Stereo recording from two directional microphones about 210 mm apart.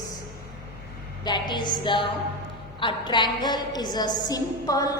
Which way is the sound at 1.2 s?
20° left (ahead or behind).